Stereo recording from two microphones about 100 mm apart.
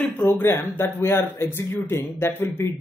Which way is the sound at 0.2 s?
25° left (ahead or behind).